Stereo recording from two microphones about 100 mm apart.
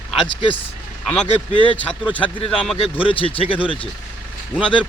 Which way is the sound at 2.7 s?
70° left (ahead or behind).